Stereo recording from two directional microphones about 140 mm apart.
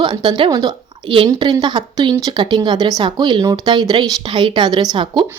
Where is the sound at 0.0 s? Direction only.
30° right (ahead or behind).